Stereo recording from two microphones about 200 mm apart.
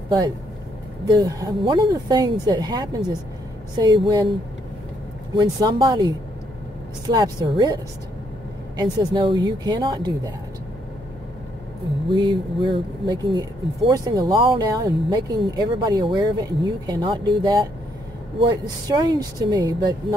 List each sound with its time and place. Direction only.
1.0 s speech: 20° right (ahead or behind)
5.4 s speech: 20° right (ahead or behind)
12.2 s speech: 25° right (ahead or behind)